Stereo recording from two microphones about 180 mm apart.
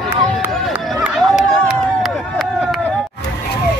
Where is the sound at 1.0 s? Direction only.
Centre (ahead or behind).